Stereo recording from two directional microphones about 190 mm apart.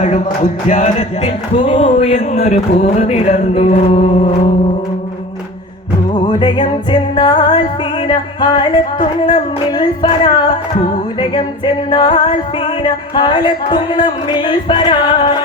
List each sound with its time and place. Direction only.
0.7 s speech: 35° left (ahead or behind)
6.1 s music: 25° left (ahead or behind)